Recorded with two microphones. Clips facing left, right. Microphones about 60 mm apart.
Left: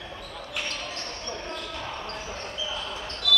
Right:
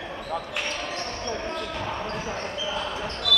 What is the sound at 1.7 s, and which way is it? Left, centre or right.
Basketball bounce, right.